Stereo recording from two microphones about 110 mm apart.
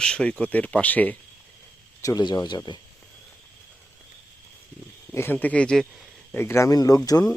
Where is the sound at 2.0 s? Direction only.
35° left (ahead or behind).